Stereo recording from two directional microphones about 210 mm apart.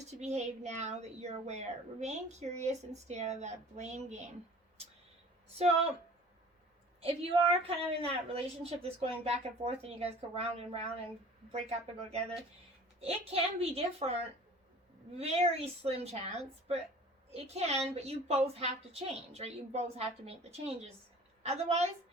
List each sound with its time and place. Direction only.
0.0 s speech: 30° right (ahead or behind)
5.5 s a woman's voice: 30° right (ahead or behind)
7.0 s a woman's voice: 25° right (ahead or behind)
13.0 s a woman's voice: 30° right (ahead or behind)
15.2 s a woman's voice: 30° right (ahead or behind)